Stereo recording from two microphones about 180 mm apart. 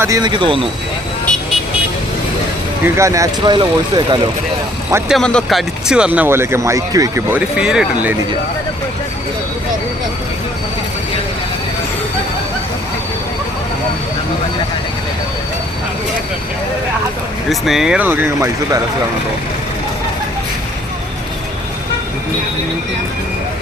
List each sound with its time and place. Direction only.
0.0 s speech: 20° right (ahead or behind)
2.8 s speech: 15° right (ahead or behind)
5.0 s speech: centre (ahead or behind); by 7.3 s 20° right (ahead or behind)
7.3 s speech: 5° right (ahead or behind)
17.5 s speech: centre (ahead or behind)